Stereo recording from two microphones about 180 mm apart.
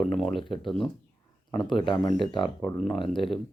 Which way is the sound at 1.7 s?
25° left (ahead or behind).